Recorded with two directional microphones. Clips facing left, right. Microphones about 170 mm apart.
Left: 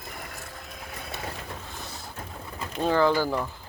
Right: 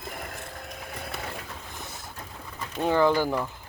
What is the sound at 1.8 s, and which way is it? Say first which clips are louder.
Boat: left 1 dB; 20° right (ahead or behind).